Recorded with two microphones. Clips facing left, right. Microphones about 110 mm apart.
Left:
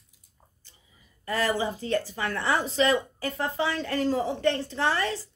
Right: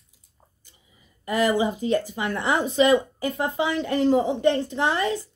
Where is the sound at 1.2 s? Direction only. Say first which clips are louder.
Right 5 dB; 15° right (ahead or behind).